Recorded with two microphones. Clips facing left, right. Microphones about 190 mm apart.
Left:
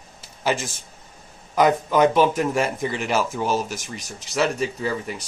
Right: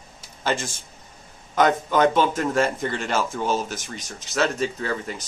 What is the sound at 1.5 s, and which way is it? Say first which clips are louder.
Speech: left 1 dB; 5° left (ahead or behind).